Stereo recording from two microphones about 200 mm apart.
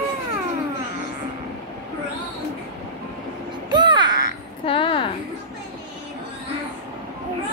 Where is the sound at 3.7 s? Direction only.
20° right (ahead or behind).